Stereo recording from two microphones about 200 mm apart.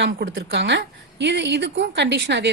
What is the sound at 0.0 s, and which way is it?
Speech, 70° right (ahead or behind).